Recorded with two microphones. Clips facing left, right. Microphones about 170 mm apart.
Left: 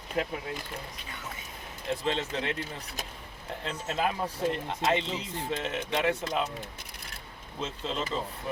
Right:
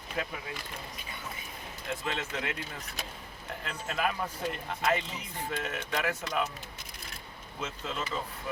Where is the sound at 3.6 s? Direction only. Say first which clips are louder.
Left 2 dB; 25° left (ahead or behind).